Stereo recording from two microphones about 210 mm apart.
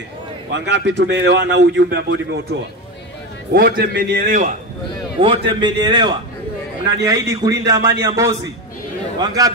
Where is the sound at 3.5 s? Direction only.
45° right (ahead or behind).